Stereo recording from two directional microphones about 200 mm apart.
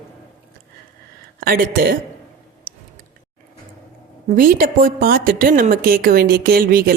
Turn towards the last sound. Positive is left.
turn(degrees=-50)  # may be behind; listen again after turning